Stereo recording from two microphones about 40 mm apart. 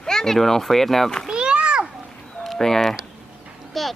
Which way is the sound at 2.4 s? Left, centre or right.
Centre.